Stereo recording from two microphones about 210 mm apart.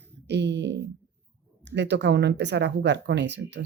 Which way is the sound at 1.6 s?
55° right (ahead or behind).